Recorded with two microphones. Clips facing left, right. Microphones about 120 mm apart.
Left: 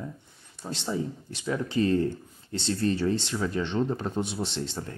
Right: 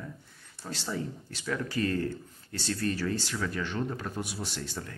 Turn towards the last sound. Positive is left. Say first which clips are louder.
# left 5 dB
turn(degrees=25)  # may be behind; listen again after turning